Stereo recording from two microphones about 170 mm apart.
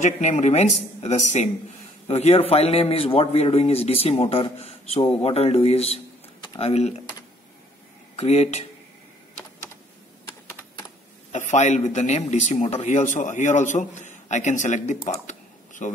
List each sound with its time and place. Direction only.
0.0 s a man's voice: 45° left (ahead or behind)
8.2 s a man's voice: 40° left (ahead or behind)
11.3 s speech: 45° left (ahead or behind)